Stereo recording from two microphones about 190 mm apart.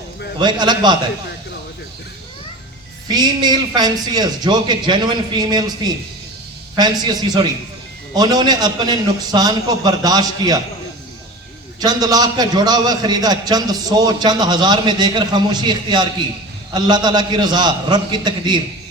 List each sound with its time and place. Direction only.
0.3 s a man's voice: 25° right (ahead or behind)
3.1 s a man's voice: 20° right (ahead or behind)
11.8 s a man's voice: 20° right (ahead or behind)